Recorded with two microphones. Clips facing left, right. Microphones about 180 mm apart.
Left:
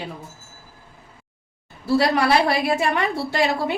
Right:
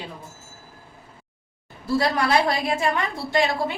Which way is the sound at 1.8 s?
70° left (ahead or behind).